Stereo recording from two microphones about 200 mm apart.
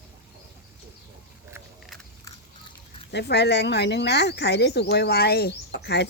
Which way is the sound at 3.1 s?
55° left (ahead or behind).